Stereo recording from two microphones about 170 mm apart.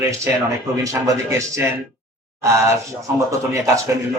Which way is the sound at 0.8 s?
20° right (ahead or behind).